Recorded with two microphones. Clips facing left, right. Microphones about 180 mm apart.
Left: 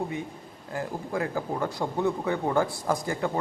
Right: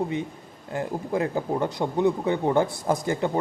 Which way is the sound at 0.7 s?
25° right (ahead or behind).